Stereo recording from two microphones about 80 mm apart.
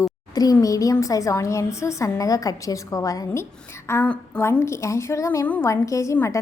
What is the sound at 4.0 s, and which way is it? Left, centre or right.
Speech, left.